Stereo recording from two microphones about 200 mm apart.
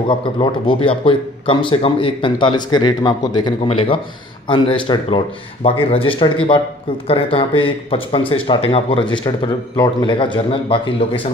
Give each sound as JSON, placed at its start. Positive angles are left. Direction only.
{"t": 0.1, "sound": "a man's voice", "side_deg": 25}